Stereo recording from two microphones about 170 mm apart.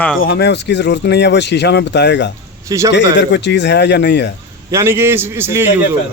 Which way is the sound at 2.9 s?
90° left.